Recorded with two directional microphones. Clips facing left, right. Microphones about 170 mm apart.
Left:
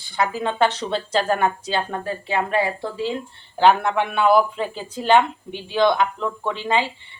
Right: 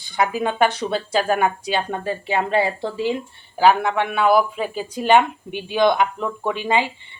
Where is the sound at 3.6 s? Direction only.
5° right (ahead or behind).